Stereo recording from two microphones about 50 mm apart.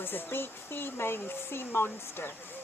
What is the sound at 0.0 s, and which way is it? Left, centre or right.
Speech, left.